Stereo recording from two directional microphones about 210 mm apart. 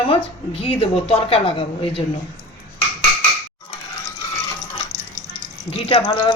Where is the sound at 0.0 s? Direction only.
25° left (ahead or behind).